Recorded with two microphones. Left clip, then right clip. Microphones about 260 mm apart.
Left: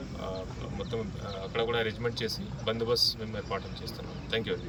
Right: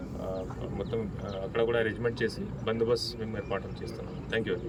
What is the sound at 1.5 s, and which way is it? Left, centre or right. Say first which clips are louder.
A man's voice: right 2 dB; centre.